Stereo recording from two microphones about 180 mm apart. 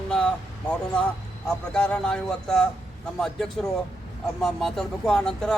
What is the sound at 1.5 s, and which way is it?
Speech, 5° left (ahead or behind).